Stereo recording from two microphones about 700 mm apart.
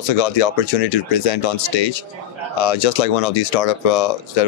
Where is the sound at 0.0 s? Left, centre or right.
Left.